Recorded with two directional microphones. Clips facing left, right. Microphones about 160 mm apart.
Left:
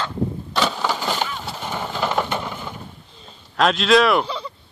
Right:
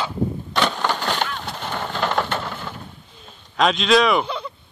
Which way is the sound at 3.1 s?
Centre (ahead or behind).